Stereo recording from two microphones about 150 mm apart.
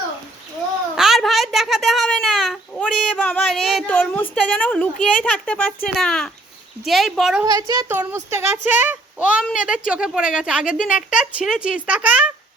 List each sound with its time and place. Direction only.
0.9 s a sound: centre (ahead or behind)
2.0 s child singing: 5° left (ahead or behind)
4.1 s a woman's voice: 10° left (ahead or behind)
7.4 s speech: 25° right (ahead or behind); by 12.3 s 10° right (ahead or behind)